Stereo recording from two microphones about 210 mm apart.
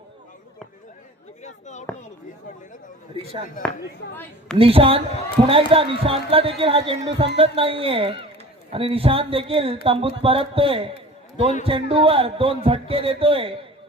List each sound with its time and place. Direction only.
1.4 s a sound: 35° left (ahead or behind)
4.1 s a woman's voice: 10° left (ahead or behind)
4.5 s a man's voice: 25° right (ahead or behind)